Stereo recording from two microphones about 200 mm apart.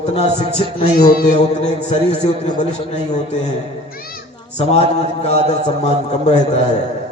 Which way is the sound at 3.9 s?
45° left (ahead or behind).